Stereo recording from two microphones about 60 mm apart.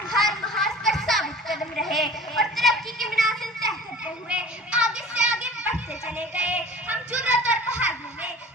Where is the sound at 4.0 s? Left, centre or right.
Centre.